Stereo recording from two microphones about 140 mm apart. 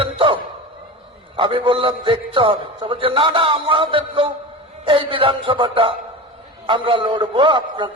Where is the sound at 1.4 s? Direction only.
40° right (ahead or behind).